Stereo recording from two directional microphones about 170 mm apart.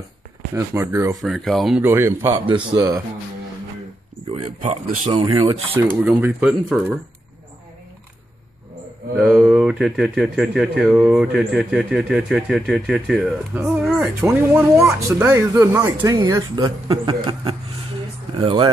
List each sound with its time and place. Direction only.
0.6 s speech: 15° right (ahead or behind)
1.2 s speech: centre (ahead or behind)
1.8 s speech: 15° right (ahead or behind)
2.3 s speech: 30° right (ahead or behind)
4.3 s speech: 40° right (ahead or behind)
5.1 s speech: 25° right (ahead or behind)
6.0 s speech: 5° right (ahead or behind)
9.2 s speech: 5° right (ahead or behind); by 18.7 s 30° right (ahead or behind)